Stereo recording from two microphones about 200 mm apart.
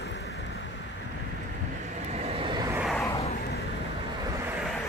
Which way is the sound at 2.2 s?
25° right (ahead or behind).